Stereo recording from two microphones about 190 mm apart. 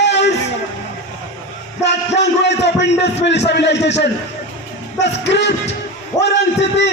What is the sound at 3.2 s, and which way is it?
Speech, 65° left (ahead or behind).